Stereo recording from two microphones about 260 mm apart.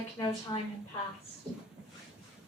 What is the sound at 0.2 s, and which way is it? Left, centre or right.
Speech, left.